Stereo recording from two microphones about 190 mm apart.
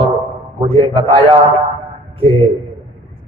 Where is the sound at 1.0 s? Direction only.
30° right (ahead or behind).